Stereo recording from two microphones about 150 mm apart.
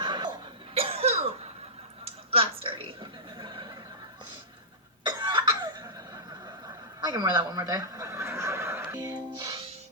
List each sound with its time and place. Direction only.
0.0 s cough: 30° right (ahead or behind)
2.3 s a sound: 40° right (ahead or behind)
5.0 s cough: 30° right (ahead or behind)
7.0 s neigh: 25° right (ahead or behind)